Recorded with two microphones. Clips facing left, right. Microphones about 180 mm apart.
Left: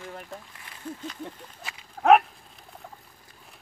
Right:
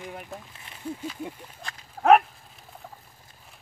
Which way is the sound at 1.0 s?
10° right (ahead or behind).